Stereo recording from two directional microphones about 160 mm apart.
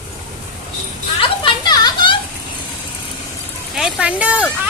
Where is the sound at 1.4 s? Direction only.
25° left (ahead or behind).